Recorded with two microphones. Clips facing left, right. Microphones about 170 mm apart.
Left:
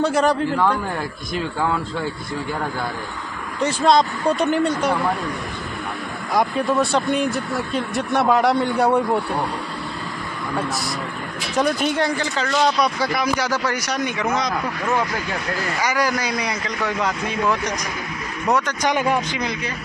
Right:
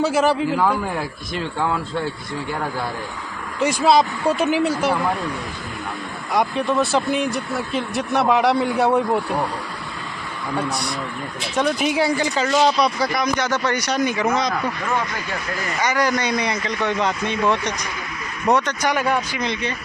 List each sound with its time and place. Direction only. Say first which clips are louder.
0.0 s speech: even; 5° right (ahead or behind)
3.6 s speech: right 1 dB; 5° right (ahead or behind)
6.3 s speech: even; centre (ahead or behind)
11.5 s speech: even; 5° right (ahead or behind)
12.7 s speech: right 1 dB; centre (ahead or behind)
15.8 s speech: right 2 dB; 10° left (ahead or behind)
18.8 s speech: left 1 dB; 20° left (ahead or behind)